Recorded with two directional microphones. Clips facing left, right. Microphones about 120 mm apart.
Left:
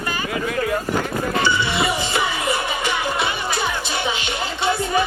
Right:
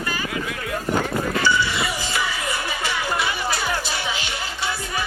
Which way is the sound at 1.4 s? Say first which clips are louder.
Left 3 dB; 25° left (ahead or behind).